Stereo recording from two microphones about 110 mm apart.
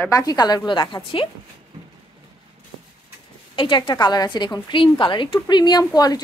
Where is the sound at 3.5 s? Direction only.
50° left (ahead or behind).